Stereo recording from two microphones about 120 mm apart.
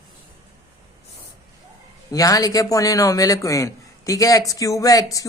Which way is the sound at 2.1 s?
30° left (ahead or behind).